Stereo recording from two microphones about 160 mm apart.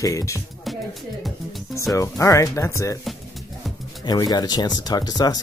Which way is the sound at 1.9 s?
20° left (ahead or behind).